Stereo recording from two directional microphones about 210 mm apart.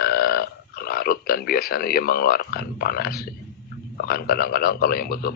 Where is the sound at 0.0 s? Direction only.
45° left (ahead or behind).